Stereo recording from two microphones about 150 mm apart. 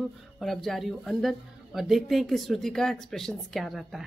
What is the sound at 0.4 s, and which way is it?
Speech, centre (ahead or behind).